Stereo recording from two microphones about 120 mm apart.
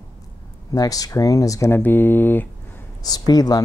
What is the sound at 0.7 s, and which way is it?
Speech, 30° left (ahead or behind).